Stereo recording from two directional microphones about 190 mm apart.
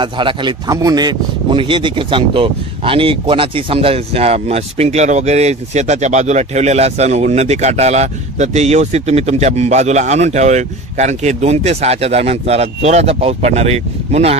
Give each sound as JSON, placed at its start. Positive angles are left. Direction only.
{"t": 0.0, "sound": "speech", "side_deg": -25}